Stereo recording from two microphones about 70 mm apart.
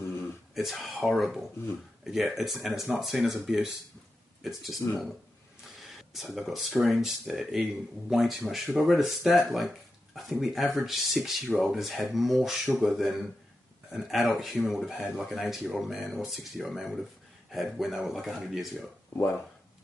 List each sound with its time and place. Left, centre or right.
0.6 s speech: centre
19.1 s speech: left